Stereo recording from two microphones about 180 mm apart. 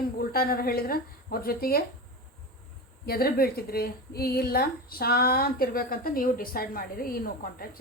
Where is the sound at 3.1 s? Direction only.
55° left (ahead or behind).